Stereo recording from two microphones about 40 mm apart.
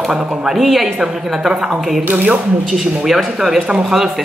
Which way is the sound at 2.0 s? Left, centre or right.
Right.